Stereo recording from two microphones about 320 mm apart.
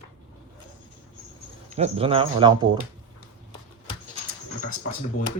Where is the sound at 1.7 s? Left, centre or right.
Centre.